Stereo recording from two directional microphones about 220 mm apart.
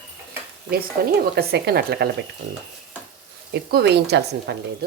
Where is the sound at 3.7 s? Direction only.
50° right (ahead or behind).